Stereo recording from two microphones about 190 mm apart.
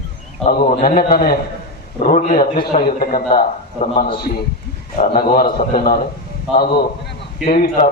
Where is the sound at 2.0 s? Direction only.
40° left (ahead or behind).